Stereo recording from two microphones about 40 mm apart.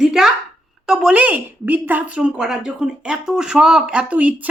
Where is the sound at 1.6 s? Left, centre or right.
Right.